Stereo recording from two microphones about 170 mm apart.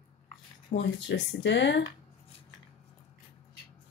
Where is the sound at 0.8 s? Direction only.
90° left.